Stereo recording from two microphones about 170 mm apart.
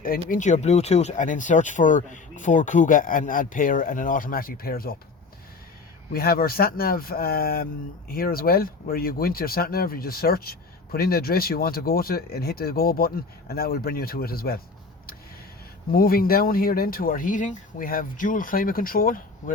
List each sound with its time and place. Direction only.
0.0 s speech: 55° left (ahead or behind)
6.1 s speech: 60° left (ahead or behind)
15.9 s speech: 60° left (ahead or behind)